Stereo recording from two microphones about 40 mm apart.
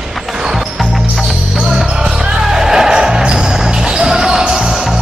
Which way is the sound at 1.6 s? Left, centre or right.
Centre.